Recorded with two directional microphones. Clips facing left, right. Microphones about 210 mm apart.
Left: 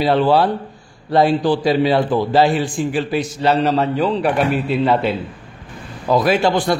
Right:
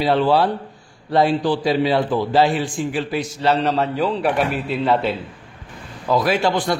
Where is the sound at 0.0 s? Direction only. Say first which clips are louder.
Left 2 dB; 50° left (ahead or behind).